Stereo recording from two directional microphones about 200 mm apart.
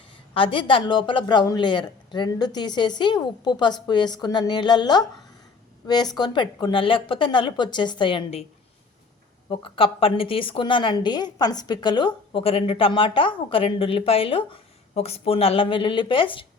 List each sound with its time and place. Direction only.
0.3 s a woman's voice: 25° left (ahead or behind)
9.5 s a woman's voice: 25° left (ahead or behind)